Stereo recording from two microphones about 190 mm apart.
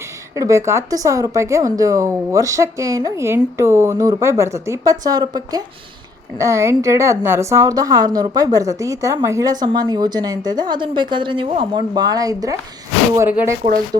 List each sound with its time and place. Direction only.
0.3 s a woman's voice: 15° right (ahead or behind)